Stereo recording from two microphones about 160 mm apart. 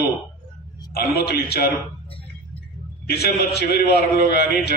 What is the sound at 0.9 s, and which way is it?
Speech, 80° left.